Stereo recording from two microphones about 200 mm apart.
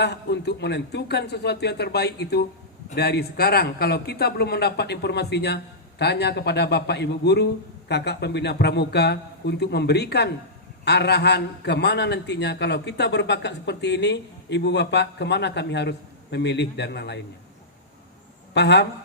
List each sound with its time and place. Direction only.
0.0 s a man's voice: 55° left (ahead or behind)
18.5 s a man's voice: 60° left (ahead or behind)